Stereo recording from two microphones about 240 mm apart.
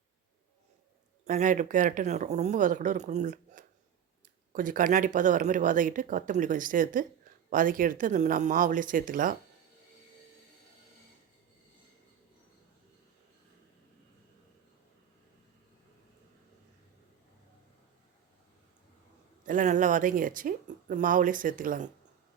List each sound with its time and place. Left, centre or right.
1.2 s speech: right
19.5 s speech: right